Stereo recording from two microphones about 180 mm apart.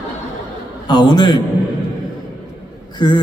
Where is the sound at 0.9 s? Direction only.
25° left (ahead or behind).